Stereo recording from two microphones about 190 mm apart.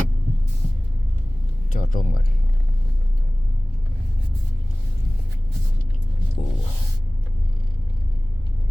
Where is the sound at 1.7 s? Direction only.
45° left (ahead or behind).